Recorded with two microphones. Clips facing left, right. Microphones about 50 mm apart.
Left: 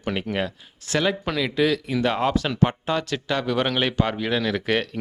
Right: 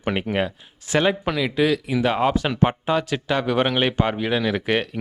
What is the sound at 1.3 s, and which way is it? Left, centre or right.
Speech, centre.